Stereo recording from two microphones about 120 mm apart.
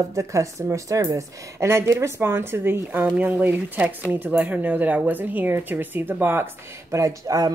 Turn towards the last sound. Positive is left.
turn(degrees=-30)  # may be behind; listen again after turning